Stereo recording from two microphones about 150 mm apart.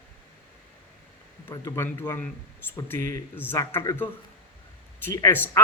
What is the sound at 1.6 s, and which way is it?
A man's voice, 20° left (ahead or behind).